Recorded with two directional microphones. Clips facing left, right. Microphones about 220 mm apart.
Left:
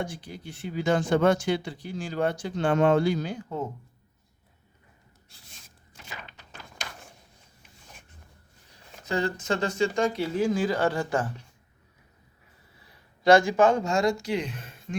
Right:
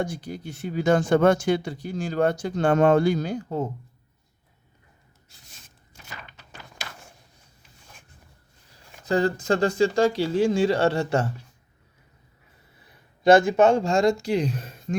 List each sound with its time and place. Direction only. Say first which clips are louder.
0.0 s speech: right 5 dB; 40° right (ahead or behind)
9.0 s speech: right 5 dB; 35° right (ahead or behind)
13.6 s speech: right 3 dB; 25° right (ahead or behind)